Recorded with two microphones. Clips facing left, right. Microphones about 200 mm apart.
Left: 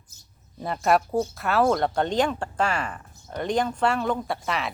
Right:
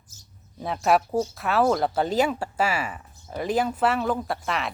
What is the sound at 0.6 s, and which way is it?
Speech, centre (ahead or behind).